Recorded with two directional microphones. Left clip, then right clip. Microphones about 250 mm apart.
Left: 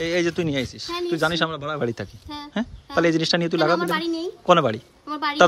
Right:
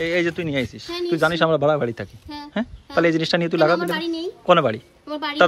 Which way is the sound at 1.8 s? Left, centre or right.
Centre.